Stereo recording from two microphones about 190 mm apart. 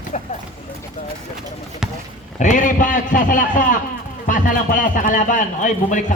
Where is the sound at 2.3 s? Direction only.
40° left (ahead or behind).